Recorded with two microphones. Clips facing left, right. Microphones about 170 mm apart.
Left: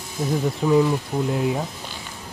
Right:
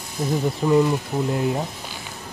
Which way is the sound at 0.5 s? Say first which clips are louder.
Even; centre (ahead or behind).